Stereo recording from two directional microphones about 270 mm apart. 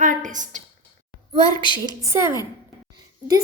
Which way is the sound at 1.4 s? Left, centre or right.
Centre.